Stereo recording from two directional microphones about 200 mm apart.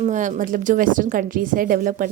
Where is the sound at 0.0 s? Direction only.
40° right (ahead or behind).